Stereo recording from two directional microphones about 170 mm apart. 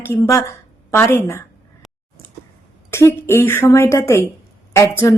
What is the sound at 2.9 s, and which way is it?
A woman's voice, 15° left (ahead or behind).